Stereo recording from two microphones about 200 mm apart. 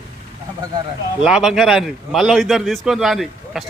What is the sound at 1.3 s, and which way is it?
A man's voice, centre (ahead or behind).